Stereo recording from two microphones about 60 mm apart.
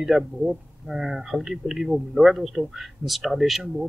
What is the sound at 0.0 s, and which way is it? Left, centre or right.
Speech, centre.